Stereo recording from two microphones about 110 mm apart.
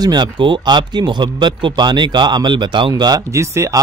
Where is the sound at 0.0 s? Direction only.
40° right (ahead or behind).